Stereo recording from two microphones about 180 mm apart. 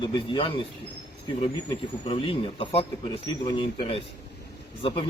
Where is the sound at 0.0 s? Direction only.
30° left (ahead or behind).